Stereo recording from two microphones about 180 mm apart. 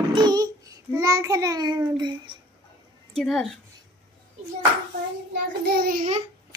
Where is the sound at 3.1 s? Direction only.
Centre (ahead or behind).